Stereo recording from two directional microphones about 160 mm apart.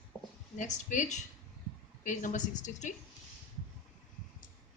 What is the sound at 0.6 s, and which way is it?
Speech, 50° left (ahead or behind).